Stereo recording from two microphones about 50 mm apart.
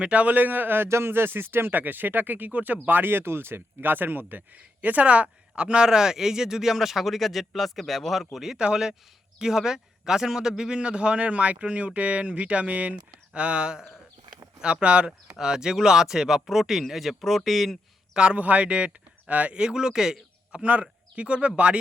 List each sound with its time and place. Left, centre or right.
0.0 s speech: right
0.9 s speech: right; by 8.5 s centre
8.5 s a man's voice: centre
18.1 s a man's voice: centre